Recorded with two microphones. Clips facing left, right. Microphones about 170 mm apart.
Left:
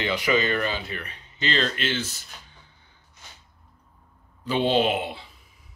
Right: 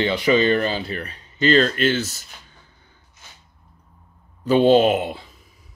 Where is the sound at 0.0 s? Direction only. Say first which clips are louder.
Right 6 dB; 30° right (ahead or behind); by 2.2 s 45° right (ahead or behind).